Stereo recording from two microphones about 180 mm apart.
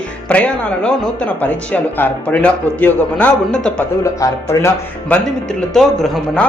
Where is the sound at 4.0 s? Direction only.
15° left (ahead or behind).